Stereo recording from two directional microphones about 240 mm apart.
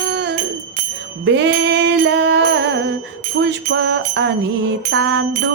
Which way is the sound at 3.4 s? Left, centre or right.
Right.